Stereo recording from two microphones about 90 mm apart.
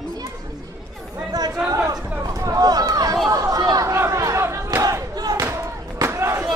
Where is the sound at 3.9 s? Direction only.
30° right (ahead or behind).